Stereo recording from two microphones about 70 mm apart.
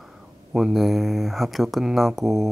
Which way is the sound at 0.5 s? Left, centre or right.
Centre.